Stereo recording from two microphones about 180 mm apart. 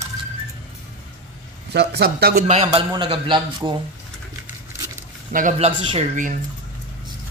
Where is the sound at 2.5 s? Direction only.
30° right (ahead or behind).